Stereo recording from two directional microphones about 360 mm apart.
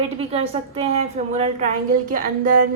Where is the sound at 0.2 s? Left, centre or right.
Centre.